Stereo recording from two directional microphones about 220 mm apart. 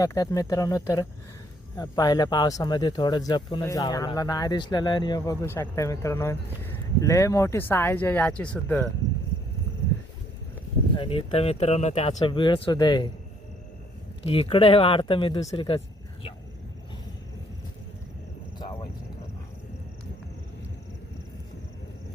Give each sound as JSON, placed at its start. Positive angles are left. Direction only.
{"t": 0.0, "sound": "speech", "side_deg": 15}
{"t": 10.9, "sound": "speech", "side_deg": 25}
{"t": 14.3, "sound": "speech", "side_deg": 25}
{"t": 18.6, "sound": "a sound", "side_deg": 20}